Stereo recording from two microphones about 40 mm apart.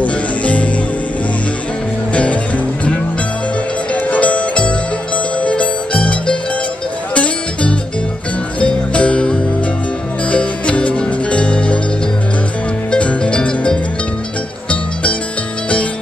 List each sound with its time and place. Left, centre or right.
0.0 s music: left
2.1 s music: left
8.5 s music: left
12.9 s music: left